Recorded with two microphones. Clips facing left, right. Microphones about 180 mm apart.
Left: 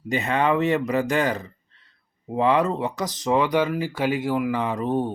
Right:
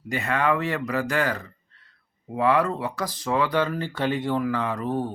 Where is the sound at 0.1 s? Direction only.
20° left (ahead or behind).